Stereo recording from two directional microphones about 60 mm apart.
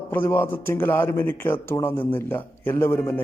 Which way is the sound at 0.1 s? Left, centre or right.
Left.